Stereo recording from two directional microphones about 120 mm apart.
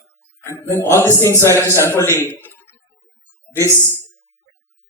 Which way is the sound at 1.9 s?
20° left (ahead or behind).